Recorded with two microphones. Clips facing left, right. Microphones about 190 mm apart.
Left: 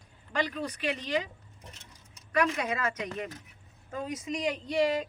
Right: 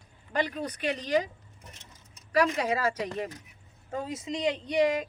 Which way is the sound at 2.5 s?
30° right (ahead or behind).